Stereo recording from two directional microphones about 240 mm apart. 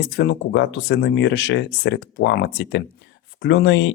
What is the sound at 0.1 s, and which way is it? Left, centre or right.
Speech, left.